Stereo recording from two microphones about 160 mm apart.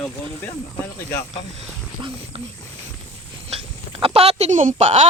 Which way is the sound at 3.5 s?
40° right (ahead or behind).